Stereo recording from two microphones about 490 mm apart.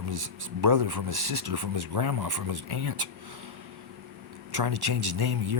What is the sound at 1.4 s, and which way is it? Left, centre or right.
Speech, right.